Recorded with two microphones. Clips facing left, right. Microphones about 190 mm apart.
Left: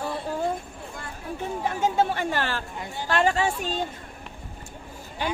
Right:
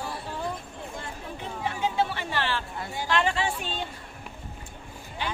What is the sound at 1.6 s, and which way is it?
A woman's voice, 45° left (ahead or behind).